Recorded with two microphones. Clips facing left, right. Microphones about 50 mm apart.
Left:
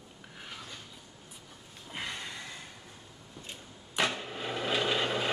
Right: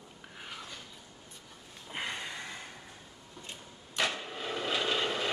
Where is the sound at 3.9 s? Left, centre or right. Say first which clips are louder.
Left 2 dB; centre.